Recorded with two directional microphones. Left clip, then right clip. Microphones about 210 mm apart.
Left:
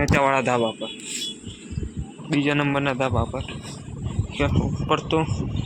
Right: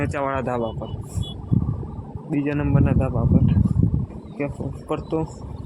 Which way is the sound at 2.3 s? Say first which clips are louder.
Left 2 dB; centre (ahead or behind).